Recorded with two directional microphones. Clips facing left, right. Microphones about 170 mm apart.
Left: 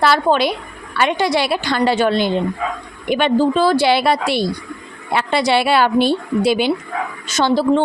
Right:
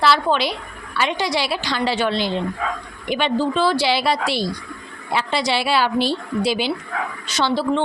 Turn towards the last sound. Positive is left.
turn(degrees=45)  # may be behind; listen again after turning